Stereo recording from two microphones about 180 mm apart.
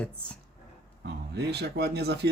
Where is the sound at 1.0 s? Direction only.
65° right (ahead or behind).